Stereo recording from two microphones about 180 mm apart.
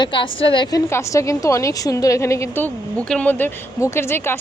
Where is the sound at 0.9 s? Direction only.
15° left (ahead or behind).